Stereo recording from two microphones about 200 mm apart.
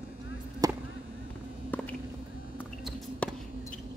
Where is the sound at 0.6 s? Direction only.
20° right (ahead or behind).